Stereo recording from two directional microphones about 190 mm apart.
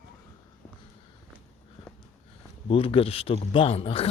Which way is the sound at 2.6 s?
30° left (ahead or behind).